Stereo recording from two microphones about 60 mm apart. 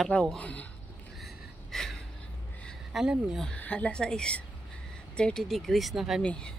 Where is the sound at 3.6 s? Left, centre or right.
Left; by 6.2 s centre.